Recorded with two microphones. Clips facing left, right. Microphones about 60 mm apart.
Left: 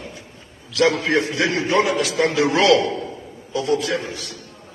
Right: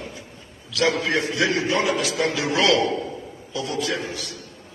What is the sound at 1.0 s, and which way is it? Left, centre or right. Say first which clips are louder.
A man's voice: left 2 dB; left.